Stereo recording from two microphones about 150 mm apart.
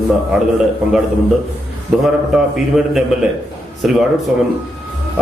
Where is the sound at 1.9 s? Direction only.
5° right (ahead or behind).